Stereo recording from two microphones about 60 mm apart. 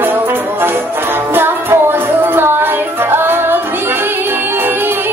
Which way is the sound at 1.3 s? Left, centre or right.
Right.